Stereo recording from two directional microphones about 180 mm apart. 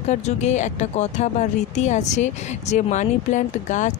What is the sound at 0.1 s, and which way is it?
Speech, 40° left (ahead or behind).